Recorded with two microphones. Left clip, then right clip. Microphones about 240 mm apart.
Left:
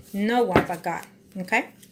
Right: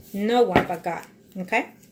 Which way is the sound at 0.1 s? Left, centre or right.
Left.